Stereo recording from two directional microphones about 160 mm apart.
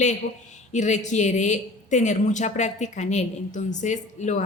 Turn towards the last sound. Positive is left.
turn(degrees=50)  # may be behind; listen again after turning